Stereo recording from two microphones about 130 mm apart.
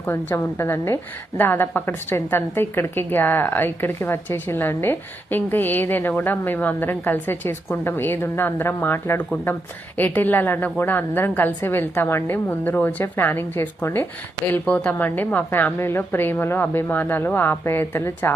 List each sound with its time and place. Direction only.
0.0 s a woman's voice: 15° left (ahead or behind)